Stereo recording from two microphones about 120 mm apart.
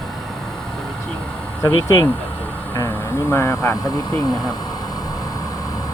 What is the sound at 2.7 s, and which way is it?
Speech, 20° left (ahead or behind).